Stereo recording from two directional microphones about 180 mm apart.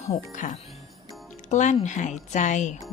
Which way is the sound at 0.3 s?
40° left (ahead or behind).